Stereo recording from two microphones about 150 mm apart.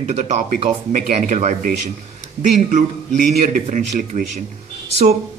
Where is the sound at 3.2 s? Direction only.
60° right (ahead or behind).